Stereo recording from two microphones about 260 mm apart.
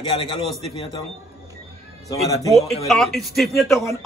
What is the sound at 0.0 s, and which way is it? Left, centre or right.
Speech, centre.